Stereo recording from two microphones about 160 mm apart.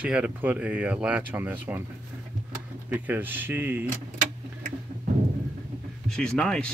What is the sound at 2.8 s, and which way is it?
Speech, 10° right (ahead or behind).